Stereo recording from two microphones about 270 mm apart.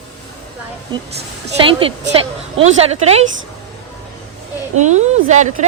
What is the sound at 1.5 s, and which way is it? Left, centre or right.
A woman's voice, centre.